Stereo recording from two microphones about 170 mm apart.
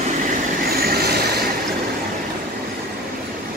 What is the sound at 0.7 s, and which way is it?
Vehicle, 65° right (ahead or behind).